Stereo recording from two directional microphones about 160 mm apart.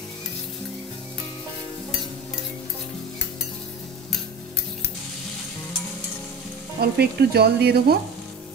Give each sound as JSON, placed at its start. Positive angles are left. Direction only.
{"t": 6.8, "sound": "frying", "side_deg": -85}